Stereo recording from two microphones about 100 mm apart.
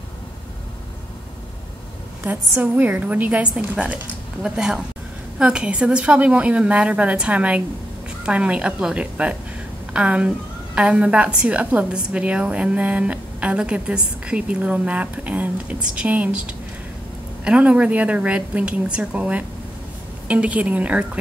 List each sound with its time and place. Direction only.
2.2 s a woman's voice: 20° right (ahead or behind)